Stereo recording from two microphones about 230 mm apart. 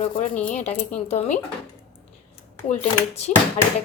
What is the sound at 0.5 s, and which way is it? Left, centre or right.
Speech, left.